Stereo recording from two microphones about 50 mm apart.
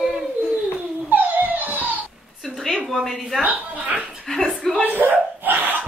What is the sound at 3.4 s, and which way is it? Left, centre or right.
Music, right.